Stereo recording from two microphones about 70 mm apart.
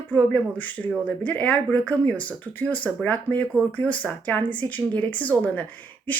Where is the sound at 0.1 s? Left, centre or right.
Left.